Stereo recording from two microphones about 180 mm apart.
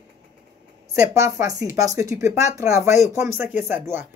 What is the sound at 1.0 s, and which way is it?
Speech, 15° right (ahead or behind).